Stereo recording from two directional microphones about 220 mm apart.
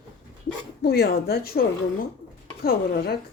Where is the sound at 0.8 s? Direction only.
45° left (ahead or behind).